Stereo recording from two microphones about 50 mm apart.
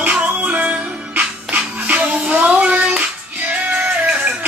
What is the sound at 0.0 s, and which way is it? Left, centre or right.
Music, right.